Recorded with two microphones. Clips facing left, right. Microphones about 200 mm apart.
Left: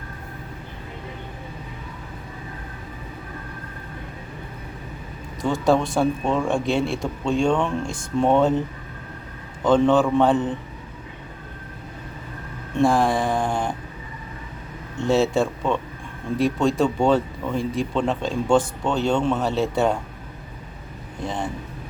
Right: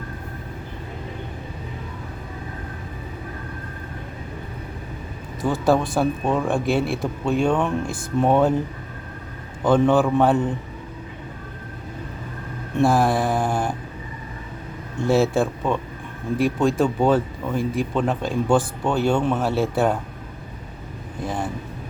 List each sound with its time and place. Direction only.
5.4 s speech: 5° right (ahead or behind)
9.6 s a man's voice: 5° right (ahead or behind)
12.8 s speech: 5° right (ahead or behind)
15.1 s speech: 5° right (ahead or behind)
21.2 s speech: 5° right (ahead or behind)